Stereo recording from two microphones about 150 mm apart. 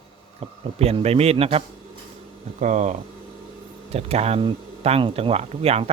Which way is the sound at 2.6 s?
55° right (ahead or behind).